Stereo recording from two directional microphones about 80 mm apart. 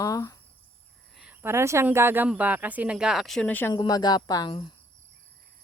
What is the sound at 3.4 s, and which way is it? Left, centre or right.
Speech, left.